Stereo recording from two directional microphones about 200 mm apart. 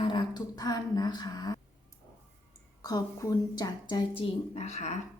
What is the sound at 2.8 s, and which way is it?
A woman's voice, 20° left (ahead or behind).